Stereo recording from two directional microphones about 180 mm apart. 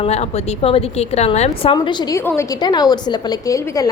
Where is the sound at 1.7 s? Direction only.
25° left (ahead or behind).